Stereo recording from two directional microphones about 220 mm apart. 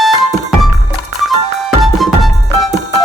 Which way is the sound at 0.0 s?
Centre (ahead or behind).